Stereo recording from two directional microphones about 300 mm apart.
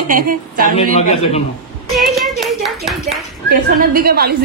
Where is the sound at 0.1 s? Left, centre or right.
Right.